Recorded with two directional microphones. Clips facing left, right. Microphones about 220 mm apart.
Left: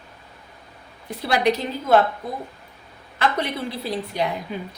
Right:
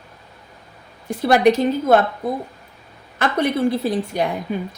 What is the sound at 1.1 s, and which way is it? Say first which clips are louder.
Speech: right 6 dB; 50° right (ahead or behind).